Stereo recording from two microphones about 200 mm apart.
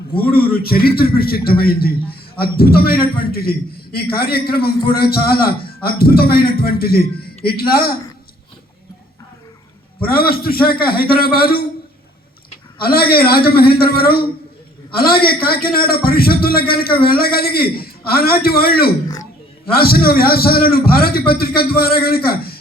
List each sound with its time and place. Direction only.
0.2 s a man's voice: 50° left (ahead or behind)
10.0 s a man's voice: 50° left (ahead or behind)
12.8 s a man's voice: 50° left (ahead or behind)